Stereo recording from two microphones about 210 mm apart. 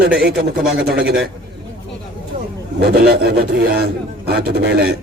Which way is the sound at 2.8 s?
50° right (ahead or behind).